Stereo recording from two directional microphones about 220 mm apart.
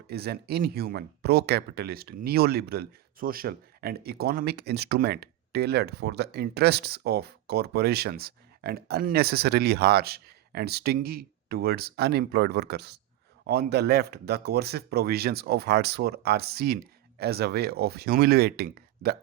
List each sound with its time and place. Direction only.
0.1 s speech: 45° right (ahead or behind)